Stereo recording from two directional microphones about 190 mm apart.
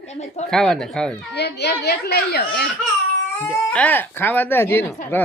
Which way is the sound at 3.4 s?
10° left (ahead or behind).